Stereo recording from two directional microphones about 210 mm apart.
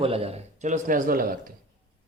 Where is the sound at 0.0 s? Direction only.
25° right (ahead or behind); by 1.5 s 45° right (ahead or behind).